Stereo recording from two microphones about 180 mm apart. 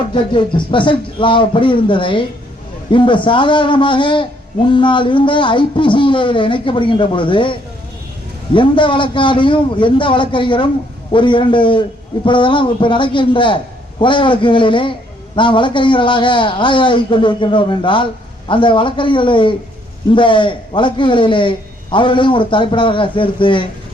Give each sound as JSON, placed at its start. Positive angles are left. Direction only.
{"t": 0.1, "sound": "a man's voice", "side_deg": 25}